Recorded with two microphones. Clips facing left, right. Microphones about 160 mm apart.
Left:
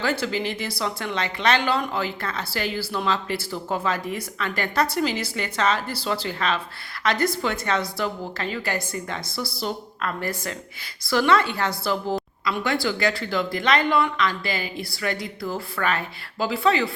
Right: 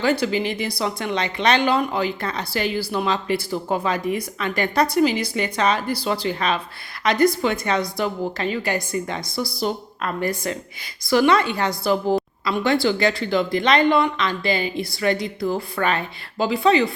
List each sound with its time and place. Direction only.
0.0 s a woman's voice: 15° right (ahead or behind)